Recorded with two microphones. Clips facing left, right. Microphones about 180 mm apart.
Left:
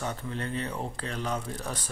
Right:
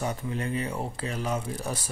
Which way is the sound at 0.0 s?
10° right (ahead or behind).